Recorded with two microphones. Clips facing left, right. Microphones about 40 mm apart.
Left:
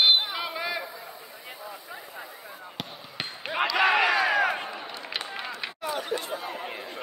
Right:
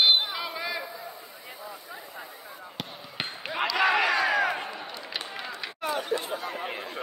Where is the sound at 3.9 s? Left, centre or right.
Left.